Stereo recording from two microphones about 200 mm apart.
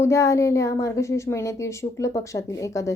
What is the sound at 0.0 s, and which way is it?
A woman's voice, 15° left (ahead or behind).